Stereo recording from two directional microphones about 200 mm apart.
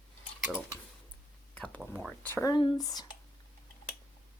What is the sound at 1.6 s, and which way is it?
Cutlery, 5° left (ahead or behind).